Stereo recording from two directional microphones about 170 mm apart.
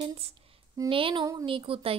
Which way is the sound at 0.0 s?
35° right (ahead or behind).